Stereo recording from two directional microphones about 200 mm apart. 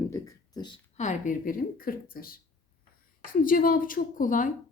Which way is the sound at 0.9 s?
35° left (ahead or behind).